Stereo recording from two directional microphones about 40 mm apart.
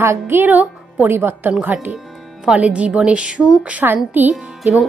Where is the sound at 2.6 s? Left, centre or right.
Right.